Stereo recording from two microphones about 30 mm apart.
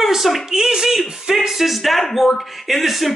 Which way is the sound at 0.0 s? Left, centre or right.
Centre.